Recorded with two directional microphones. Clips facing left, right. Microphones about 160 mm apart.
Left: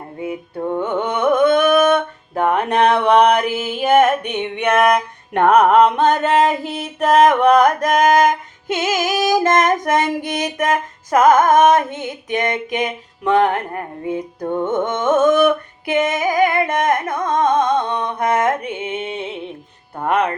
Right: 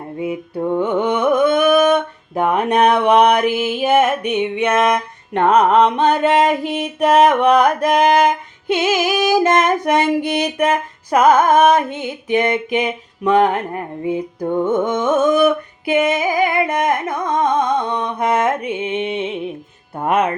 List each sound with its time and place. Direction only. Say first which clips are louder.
0.2 s music: right 3 dB; 15° right (ahead or behind)
0.7 s carnatic music: right 3 dB; 10° right (ahead or behind)
1.5 s a sound: even; 5° right (ahead or behind)
4.8 s music: left 1 dB; centre (ahead or behind)
6.0 s music: right 1 dB; 10° right (ahead or behind)
9.3 s a sound: even; 10° right (ahead or behind)
14.5 s music: right 2 dB; 10° right (ahead or behind)